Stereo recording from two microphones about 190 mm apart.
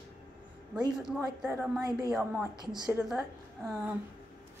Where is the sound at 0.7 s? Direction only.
5° right (ahead or behind).